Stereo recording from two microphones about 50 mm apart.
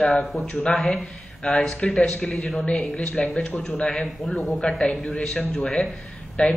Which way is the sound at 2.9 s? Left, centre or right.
Left.